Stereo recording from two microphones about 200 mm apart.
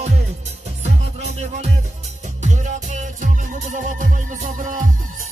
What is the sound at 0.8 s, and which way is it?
Music, 35° right (ahead or behind).